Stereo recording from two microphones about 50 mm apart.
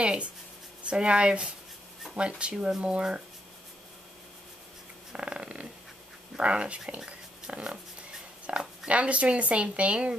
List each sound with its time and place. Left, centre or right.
0.0 s speech: centre
5.1 s speech: right
7.1 s a sound: right
8.5 s speech: right